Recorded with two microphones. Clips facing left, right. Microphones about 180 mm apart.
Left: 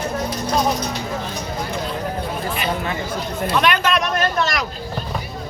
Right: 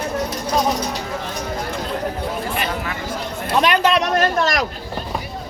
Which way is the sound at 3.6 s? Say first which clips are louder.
Right 4 dB; 30° right (ahead or behind).